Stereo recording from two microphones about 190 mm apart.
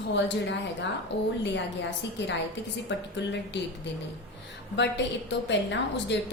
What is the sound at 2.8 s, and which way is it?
Speech, 65° left (ahead or behind).